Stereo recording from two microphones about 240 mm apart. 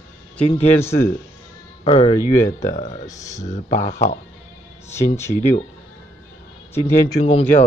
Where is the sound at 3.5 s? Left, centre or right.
Left.